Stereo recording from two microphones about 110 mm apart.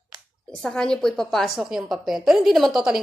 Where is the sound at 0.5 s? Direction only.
5° left (ahead or behind).